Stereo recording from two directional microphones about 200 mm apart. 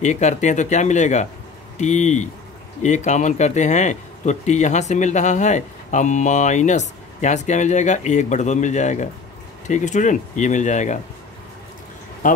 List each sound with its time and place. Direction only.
0.0 s speech: 35° left (ahead or behind)